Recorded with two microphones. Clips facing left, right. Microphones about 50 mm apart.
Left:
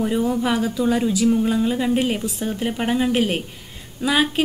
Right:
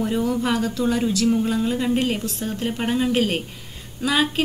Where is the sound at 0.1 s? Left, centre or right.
Centre.